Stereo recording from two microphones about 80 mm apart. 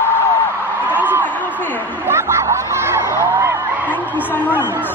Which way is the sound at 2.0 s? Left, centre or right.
Right.